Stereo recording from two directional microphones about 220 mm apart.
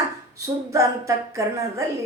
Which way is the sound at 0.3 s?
15° right (ahead or behind).